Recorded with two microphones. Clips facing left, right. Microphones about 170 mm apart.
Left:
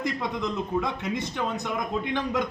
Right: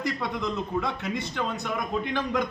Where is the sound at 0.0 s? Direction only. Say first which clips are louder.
Left 1 dB; 20° left (ahead or behind).